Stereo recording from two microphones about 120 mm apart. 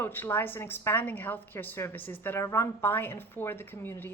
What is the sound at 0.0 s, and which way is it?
A woman's voice, 15° left (ahead or behind).